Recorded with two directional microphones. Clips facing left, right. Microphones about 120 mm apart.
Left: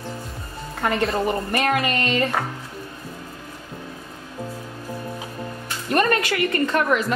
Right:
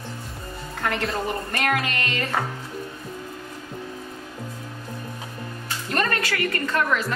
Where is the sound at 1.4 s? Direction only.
20° left (ahead or behind).